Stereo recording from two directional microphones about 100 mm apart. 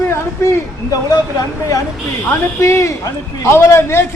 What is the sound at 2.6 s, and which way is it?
A man's voice, 30° left (ahead or behind).